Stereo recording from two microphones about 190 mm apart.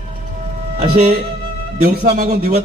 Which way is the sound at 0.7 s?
35° right (ahead or behind).